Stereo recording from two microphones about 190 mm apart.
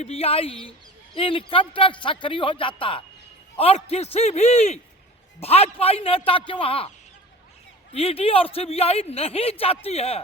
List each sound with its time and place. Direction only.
0.0 s a man's voice: 30° left (ahead or behind)
7.9 s speech: 30° left (ahead or behind)